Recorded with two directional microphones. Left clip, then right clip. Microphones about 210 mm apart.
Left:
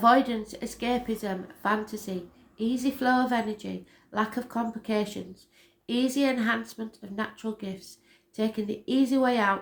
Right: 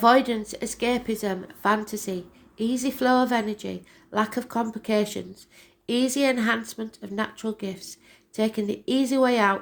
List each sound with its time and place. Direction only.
0.0 s a woman's voice: 40° right (ahead or behind)